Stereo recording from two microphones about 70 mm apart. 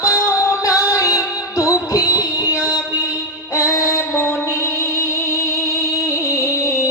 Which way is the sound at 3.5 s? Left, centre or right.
Left.